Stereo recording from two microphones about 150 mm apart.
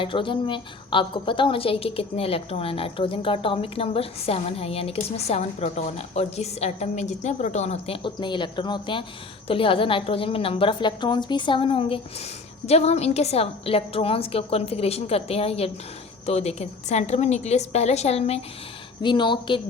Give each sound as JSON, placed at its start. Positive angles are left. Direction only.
{"t": 0.0, "sound": "a woman's voice", "side_deg": 35}
{"t": 19.0, "sound": "a woman's voice", "side_deg": 30}